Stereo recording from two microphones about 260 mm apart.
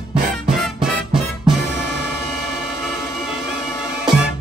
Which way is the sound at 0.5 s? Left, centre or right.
Centre.